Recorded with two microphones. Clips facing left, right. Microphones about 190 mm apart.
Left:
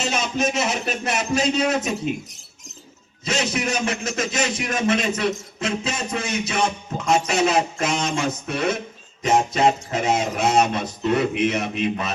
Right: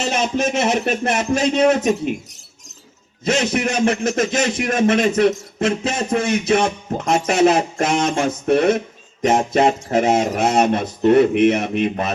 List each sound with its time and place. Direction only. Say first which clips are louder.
0.5 s speech: right 6 dB; 55° right (ahead or behind)
3.2 s speech: right 5 dB; 55° right (ahead or behind)